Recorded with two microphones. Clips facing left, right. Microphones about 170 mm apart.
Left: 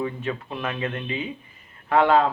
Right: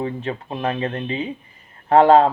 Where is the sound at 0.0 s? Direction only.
35° right (ahead or behind).